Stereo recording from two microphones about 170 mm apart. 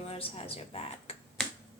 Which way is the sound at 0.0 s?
35° left (ahead or behind).